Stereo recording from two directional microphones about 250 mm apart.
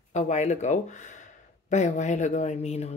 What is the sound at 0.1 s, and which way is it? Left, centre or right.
Speech, left.